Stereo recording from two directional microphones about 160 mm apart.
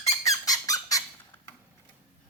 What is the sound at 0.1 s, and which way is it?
Squeak, 20° left (ahead or behind).